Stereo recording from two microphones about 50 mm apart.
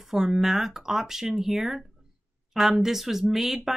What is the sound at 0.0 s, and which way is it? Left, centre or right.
Speech, centre.